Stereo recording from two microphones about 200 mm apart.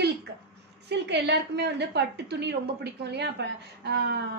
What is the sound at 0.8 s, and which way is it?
A woman's voice, 60° right (ahead or behind).